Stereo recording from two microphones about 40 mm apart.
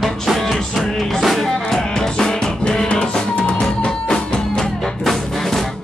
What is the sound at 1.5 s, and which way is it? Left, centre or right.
Music, centre.